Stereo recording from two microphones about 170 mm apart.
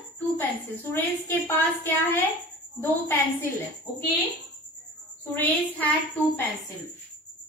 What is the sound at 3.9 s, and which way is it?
Speech, 25° left (ahead or behind).